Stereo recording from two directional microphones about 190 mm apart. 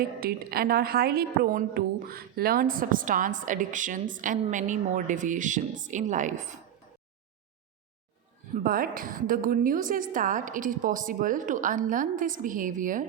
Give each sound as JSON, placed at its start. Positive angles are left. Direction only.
{"t": 0.2, "sound": "a woman's voice", "side_deg": -50}
{"t": 8.5, "sound": "a woman's voice", "side_deg": -50}